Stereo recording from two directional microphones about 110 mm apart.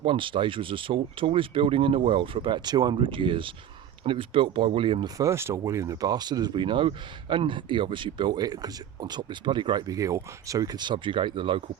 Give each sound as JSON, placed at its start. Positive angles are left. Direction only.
{"t": 0.0, "sound": "speech", "side_deg": -50}
{"t": 5.0, "sound": "speech", "side_deg": -30}